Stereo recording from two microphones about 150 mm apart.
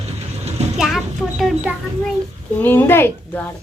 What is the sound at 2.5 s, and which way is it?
Speech, 15° left (ahead or behind).